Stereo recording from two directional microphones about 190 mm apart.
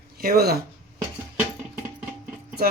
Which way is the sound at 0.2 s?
50° right (ahead or behind).